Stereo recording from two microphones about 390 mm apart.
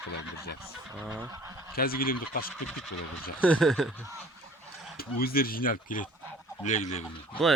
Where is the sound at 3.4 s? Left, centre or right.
Centre.